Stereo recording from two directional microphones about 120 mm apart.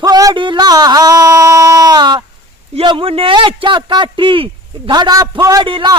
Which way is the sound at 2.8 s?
50° right (ahead or behind).